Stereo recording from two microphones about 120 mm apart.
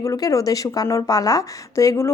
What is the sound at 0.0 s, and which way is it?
Speech, 30° left (ahead or behind).